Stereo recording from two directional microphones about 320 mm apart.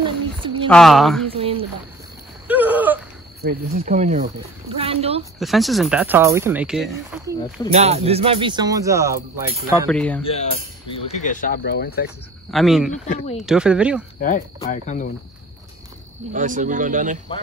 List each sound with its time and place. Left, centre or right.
0.0 s a sound: centre
0.7 s speech: centre
1.3 s speech: centre
2.4 s a sound: centre
3.4 s speech: right
5.4 s speech: centre
7.7 s speech: centre
9.8 s speech: centre
10.2 s speech: centre
12.4 s speech: centre
13.0 s speech: left
13.4 s speech: centre
14.2 s speech: left
16.3 s speech: right